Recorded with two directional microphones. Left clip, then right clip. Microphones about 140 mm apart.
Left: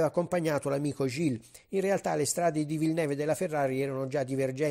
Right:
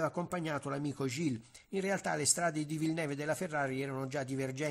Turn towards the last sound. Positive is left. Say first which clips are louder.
# left 8 dB
turn(degrees=30)  # may be behind; listen again after turning